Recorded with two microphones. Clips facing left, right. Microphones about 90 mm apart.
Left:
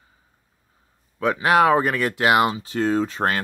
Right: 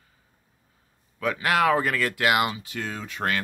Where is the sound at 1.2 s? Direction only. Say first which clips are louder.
Left 5 dB; 25° left (ahead or behind).